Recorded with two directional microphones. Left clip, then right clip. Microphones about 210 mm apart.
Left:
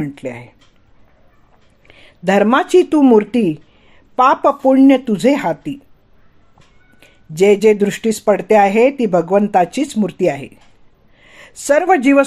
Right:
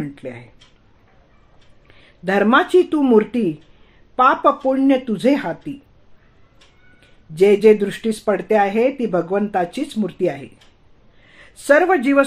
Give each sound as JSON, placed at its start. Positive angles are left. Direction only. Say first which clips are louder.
{"t": 0.0, "sound": "speech", "louder": "left 5 dB", "side_deg": 35}
{"t": 1.9, "sound": "speech", "louder": "left 5 dB", "side_deg": 35}
{"t": 7.0, "sound": "speech", "louder": "left 1 dB", "side_deg": 35}